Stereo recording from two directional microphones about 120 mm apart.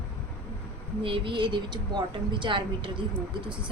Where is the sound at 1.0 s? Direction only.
45° right (ahead or behind).